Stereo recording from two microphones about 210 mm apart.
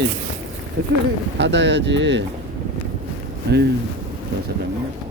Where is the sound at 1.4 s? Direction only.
55° right (ahead or behind).